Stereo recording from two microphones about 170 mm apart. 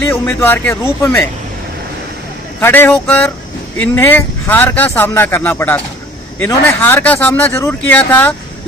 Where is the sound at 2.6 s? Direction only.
15° left (ahead or behind).